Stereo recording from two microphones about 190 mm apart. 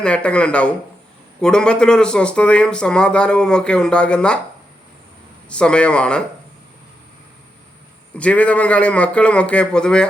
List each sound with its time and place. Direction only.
0.0 s speech: 5° left (ahead or behind)
5.5 s speech: 5° left (ahead or behind)
8.1 s a man's voice: 5° left (ahead or behind)